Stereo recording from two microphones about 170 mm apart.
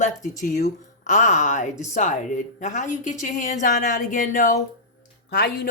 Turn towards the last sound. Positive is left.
turn(degrees=70)  # may be behind; listen again after turning